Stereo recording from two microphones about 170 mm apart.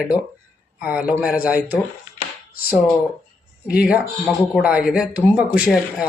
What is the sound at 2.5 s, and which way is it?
Speech, 60° left (ahead or behind).